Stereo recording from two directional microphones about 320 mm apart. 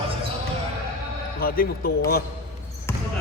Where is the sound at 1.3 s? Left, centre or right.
Left.